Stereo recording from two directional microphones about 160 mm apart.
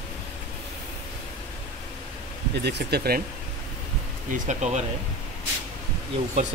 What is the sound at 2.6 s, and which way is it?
Speech, 90° right.